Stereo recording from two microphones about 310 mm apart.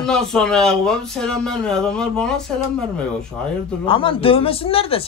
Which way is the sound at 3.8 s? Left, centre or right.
Centre.